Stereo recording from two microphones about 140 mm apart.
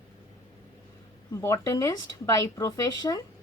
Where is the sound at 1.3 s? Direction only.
20° left (ahead or behind).